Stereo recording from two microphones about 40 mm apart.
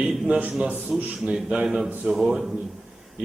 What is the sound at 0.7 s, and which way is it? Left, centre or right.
Speech, right.